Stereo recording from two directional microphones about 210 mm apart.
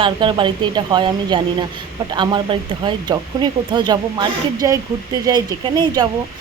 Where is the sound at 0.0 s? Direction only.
25° right (ahead or behind).